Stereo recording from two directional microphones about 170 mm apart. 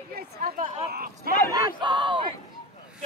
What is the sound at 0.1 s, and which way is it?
Chatter, 60° right (ahead or behind).